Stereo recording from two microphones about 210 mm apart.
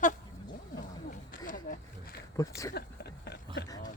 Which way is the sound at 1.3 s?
40° left (ahead or behind).